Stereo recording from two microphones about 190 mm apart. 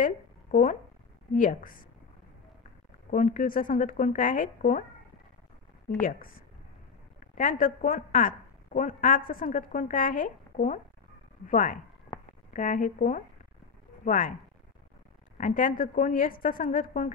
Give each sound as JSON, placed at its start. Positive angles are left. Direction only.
{"t": 0.0, "sound": "a sound", "side_deg": 45}
{"t": 1.3, "sound": "a woman's voice", "side_deg": 40}
{"t": 3.1, "sound": "a woman's voice", "side_deg": 40}
{"t": 5.9, "sound": "a woman's voice", "side_deg": 45}
{"t": 7.3, "sound": "a woman's voice", "side_deg": 45}
{"t": 15.3, "sound": "a woman's voice", "side_deg": 40}